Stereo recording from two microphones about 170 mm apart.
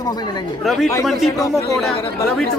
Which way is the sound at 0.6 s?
Centre (ahead or behind).